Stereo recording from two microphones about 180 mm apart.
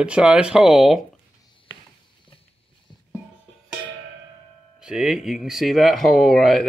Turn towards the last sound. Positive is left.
turn(degrees=0)  # may be behind; listen again after turning